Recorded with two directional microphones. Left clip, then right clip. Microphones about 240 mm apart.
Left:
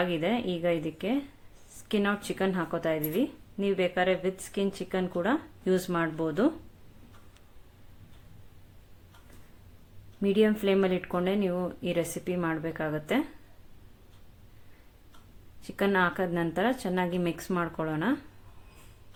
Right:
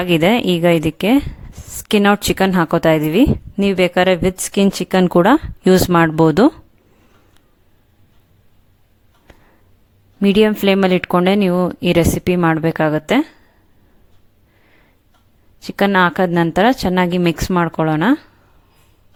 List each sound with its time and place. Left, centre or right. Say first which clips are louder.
0.0 s a woman's voice: right 14 dB; right
10.2 s a woman's voice: right 12 dB; right
15.6 s a woman's voice: right 12 dB; right